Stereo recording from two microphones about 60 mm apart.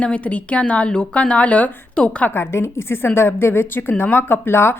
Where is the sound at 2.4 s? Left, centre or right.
Left.